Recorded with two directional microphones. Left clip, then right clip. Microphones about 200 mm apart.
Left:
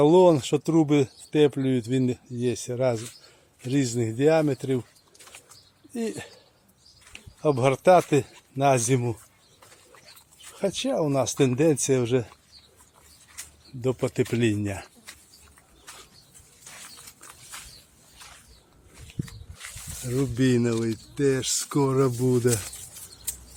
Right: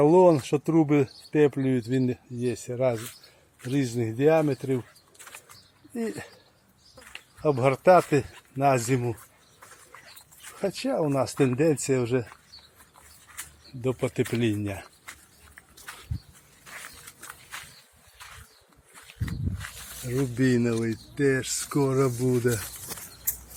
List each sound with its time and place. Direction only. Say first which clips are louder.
0.0 s speech: left 1 dB; 20° left (ahead or behind)
5.9 s speech: left 1 dB; 20° left (ahead or behind)
7.4 s speech: left 1 dB; 25° left (ahead or behind)
10.8 s speech: even; 20° left (ahead or behind)
13.8 s speech: left 2 dB; 15° left (ahead or behind)
20.1 s speech: left 1 dB; 15° left (ahead or behind)